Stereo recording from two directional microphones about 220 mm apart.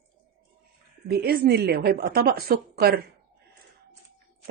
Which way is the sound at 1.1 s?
45° right (ahead or behind).